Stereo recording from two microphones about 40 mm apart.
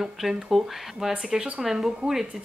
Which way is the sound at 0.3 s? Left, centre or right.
Centre.